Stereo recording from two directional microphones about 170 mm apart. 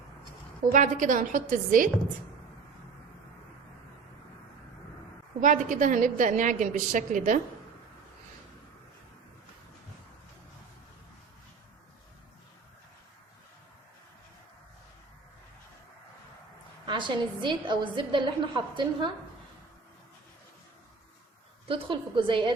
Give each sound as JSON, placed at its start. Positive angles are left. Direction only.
{"t": 0.7, "sound": "a woman's voice", "side_deg": -50}
{"t": 5.4, "sound": "a woman's voice", "side_deg": -50}
{"t": 16.8, "sound": "a woman's voice", "side_deg": -30}
{"t": 21.7, "sound": "a woman's voice", "side_deg": -30}